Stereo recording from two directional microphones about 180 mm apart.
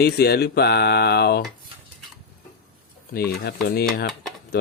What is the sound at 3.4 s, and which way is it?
Speech, 60° left (ahead or behind).